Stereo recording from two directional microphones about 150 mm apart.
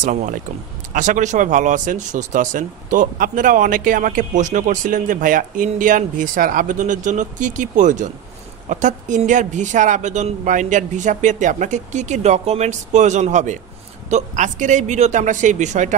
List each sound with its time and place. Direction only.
0.0 s speech: 60° right (ahead or behind)